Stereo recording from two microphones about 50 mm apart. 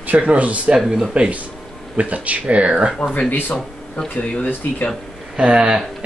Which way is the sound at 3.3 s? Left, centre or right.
Left.